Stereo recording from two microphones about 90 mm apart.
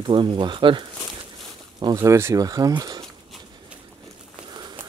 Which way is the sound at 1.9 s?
35° right (ahead or behind).